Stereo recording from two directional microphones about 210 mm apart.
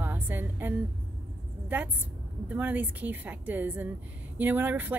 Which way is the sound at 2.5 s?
10° right (ahead or behind).